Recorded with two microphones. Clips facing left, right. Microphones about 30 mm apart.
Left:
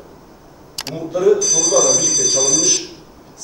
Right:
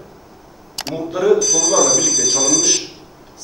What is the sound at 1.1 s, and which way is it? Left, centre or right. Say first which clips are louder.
Speech: left 1 dB; right.